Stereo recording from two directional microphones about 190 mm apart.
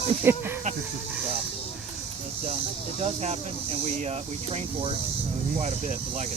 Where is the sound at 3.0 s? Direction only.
35° right (ahead or behind).